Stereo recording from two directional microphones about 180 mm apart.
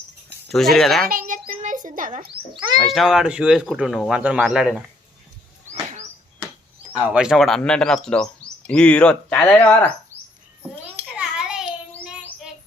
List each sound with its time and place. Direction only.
0.4 s speech: centre (ahead or behind)
1.4 s a sound: 50° right (ahead or behind)
2.2 s speech: 30° right (ahead or behind)
2.6 s speech: centre (ahead or behind)
6.9 s speech: 5° right (ahead or behind)
11.2 s child singing: 5° right (ahead or behind)